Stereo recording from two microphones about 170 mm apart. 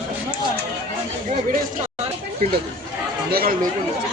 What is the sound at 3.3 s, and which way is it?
Speech, 60° right (ahead or behind).